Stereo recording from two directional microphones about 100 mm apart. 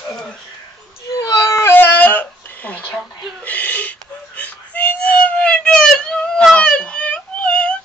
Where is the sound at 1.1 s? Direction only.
35° left (ahead or behind); by 2.8 s 15° left (ahead or behind).